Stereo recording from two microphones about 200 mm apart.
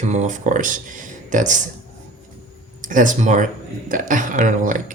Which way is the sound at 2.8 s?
40° right (ahead or behind).